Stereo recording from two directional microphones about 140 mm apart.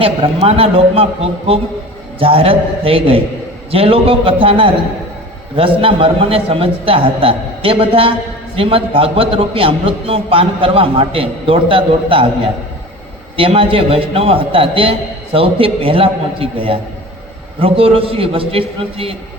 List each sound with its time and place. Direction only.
0.0 s a man's voice: 45° right (ahead or behind)
13.3 s a man's voice: 40° right (ahead or behind)